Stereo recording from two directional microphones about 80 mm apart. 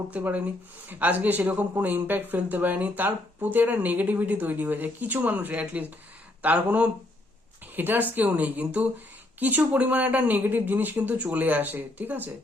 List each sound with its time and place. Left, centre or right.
0.1 s speech: centre